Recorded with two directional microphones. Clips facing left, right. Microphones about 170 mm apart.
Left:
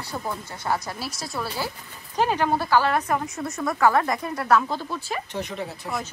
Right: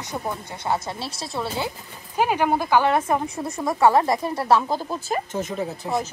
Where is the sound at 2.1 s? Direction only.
10° right (ahead or behind); by 5.4 s 40° right (ahead or behind).